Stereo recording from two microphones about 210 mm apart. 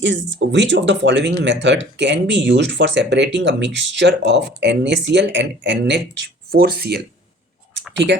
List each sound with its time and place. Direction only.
0.0 s speech: 60° right (ahead or behind)